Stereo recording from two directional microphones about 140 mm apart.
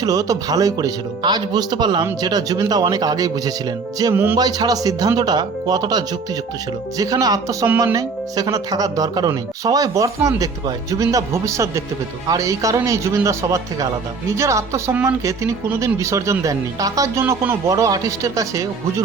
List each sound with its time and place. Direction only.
0.0 s speech: 25° right (ahead or behind)
3.9 s music: 20° right (ahead or behind)
4.4 s speech: 25° right (ahead or behind)